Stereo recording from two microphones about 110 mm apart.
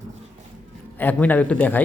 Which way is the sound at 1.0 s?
15° left (ahead or behind).